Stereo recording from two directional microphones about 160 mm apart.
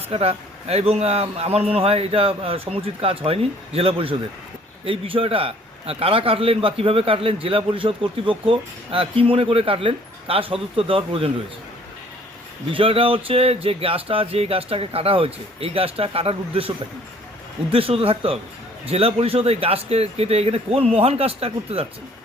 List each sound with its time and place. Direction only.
0.1 s a man's voice: 40° right (ahead or behind)
12.7 s a man's voice: 35° right (ahead or behind)